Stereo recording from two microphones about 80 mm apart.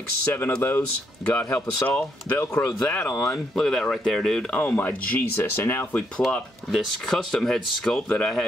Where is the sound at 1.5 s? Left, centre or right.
Left.